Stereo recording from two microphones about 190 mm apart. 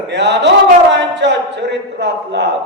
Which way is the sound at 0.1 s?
65° right (ahead or behind).